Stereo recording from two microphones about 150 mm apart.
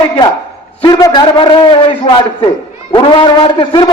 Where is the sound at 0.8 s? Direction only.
25° left (ahead or behind).